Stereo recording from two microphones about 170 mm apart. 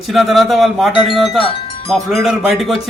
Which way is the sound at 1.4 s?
30° left (ahead or behind).